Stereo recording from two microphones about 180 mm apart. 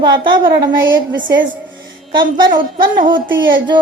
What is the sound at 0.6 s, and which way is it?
Speech, 80° right.